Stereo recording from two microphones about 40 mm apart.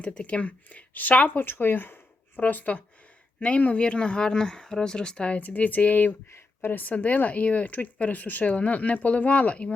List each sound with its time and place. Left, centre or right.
0.0 s speech: left
1.5 s speech: left
3.4 s speech: left
5.4 s speech: left
6.3 s a sound: left
6.7 s speech: left